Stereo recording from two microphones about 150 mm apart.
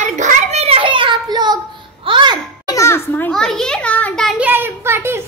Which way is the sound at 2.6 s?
20° left (ahead or behind).